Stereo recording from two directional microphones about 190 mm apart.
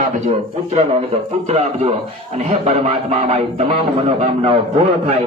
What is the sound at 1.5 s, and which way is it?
Speech, 35° right (ahead or behind).